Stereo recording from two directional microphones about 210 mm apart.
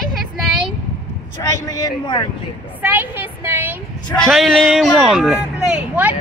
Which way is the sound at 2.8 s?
10° right (ahead or behind).